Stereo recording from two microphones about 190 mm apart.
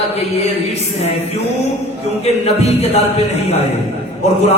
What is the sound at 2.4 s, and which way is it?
A man's voice, 35° left (ahead or behind).